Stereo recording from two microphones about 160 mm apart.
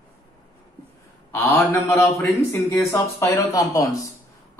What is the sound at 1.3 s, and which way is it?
A man's voice, 15° left (ahead or behind).